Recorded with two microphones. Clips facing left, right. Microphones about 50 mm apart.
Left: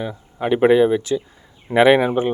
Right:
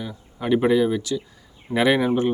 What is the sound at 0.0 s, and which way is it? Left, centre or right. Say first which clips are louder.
Speech: left 5 dB; left.